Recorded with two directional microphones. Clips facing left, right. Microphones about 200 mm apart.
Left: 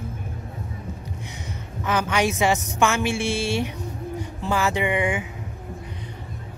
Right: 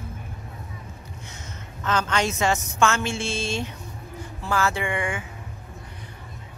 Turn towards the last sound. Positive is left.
turn(degrees=20)  # may be behind; listen again after turning